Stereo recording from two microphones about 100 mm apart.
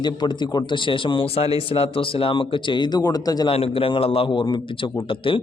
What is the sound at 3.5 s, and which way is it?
A man's voice, 70° left (ahead or behind).